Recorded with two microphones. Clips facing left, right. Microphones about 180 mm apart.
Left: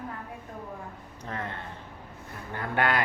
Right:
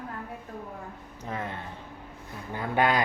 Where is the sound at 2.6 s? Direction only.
15° right (ahead or behind).